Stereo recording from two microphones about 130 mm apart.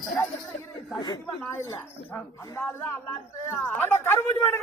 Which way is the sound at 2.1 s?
15° left (ahead or behind).